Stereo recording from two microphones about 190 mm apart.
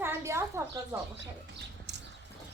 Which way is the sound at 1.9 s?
65° right (ahead or behind).